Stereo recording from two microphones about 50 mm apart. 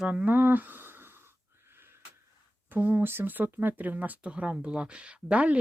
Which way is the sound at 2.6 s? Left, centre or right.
Right.